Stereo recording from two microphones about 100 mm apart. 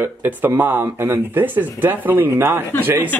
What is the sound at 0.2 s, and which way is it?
Speech, 20° right (ahead or behind).